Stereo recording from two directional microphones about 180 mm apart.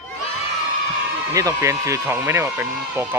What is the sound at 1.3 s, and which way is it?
Speech, 20° right (ahead or behind).